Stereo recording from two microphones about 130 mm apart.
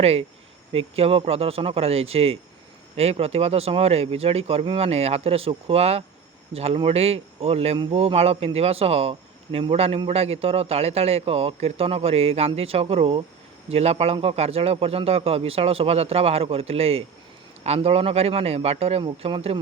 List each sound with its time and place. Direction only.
0.0 s a man's voice: 50° right (ahead or behind)